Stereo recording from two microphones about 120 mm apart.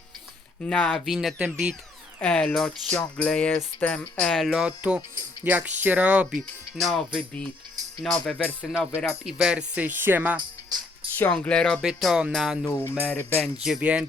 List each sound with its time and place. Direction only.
0.6 s speech: 10° left (ahead or behind); by 6.2 s 10° right (ahead or behind)
6.3 s speech: centre (ahead or behind)
8.6 s speech: 5° right (ahead or behind)
11.2 s speech: 10° left (ahead or behind)
12.6 s speech: 15° left (ahead or behind)
13.6 s speech: 5° right (ahead or behind)